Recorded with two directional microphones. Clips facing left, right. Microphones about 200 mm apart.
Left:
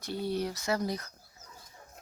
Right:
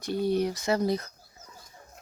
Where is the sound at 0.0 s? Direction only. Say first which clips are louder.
Right 6 dB; 15° right (ahead or behind).